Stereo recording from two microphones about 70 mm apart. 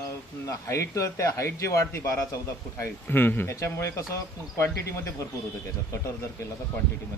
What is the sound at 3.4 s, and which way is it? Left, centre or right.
Speech, left.